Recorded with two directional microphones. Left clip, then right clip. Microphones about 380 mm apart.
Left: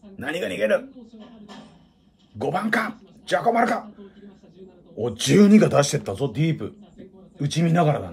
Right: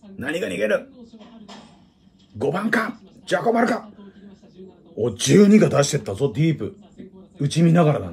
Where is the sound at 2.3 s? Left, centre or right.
Centre.